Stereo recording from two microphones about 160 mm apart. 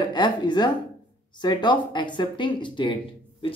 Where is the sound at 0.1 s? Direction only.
30° left (ahead or behind).